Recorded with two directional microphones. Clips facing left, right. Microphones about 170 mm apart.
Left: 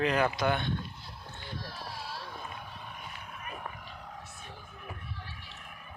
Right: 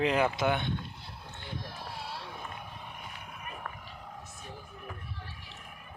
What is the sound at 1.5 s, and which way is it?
Vehicle, 20° right (ahead or behind).